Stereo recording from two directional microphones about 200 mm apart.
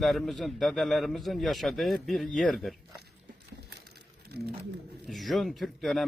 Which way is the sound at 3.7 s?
55° right (ahead or behind).